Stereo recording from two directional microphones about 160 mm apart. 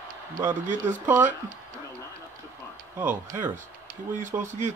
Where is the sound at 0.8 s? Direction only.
10° right (ahead or behind).